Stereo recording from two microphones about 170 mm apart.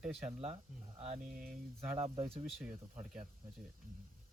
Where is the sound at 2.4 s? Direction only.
5° right (ahead or behind).